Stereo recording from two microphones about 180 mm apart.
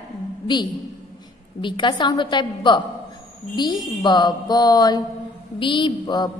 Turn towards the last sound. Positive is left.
turn(degrees=25)  # may be behind; listen again after turning